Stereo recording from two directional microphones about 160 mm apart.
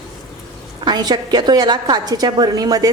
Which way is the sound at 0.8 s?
25° right (ahead or behind).